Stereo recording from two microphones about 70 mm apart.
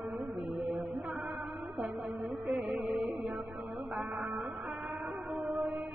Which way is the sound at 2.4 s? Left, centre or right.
Right.